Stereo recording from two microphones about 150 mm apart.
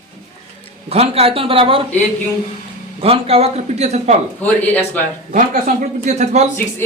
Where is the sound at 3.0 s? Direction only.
40° right (ahead or behind).